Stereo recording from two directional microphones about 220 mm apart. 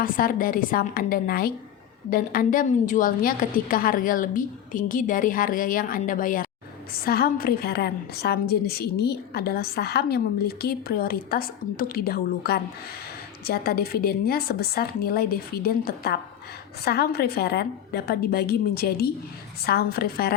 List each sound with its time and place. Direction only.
0.0 s a woman's voice: 40° left (ahead or behind)